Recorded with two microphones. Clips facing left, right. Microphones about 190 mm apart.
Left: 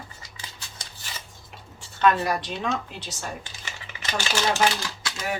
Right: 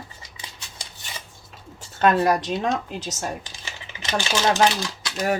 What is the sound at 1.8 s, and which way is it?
Speech, 45° right (ahead or behind).